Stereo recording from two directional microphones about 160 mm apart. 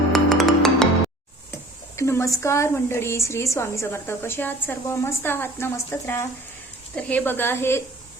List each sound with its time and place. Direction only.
0.1 s music: centre (ahead or behind)
2.0 s a woman's voice: 15° left (ahead or behind)